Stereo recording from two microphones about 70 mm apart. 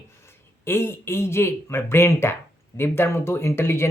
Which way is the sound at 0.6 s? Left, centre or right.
Left.